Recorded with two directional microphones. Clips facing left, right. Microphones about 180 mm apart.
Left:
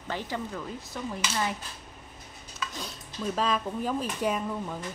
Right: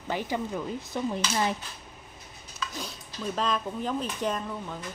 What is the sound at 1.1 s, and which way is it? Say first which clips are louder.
Dishes: right 1 dB; 20° right (ahead or behind).